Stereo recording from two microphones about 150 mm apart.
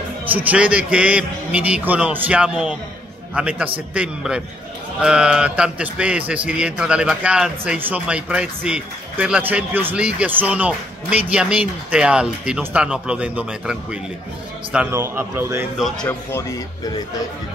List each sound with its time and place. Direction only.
0.3 s a man's voice: 10° right (ahead or behind)
15.8 s speech: 5° left (ahead or behind)
16.3 s speech: 20° left (ahead or behind)